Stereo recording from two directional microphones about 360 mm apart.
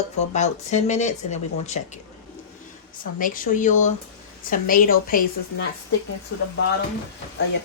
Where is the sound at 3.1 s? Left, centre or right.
Left.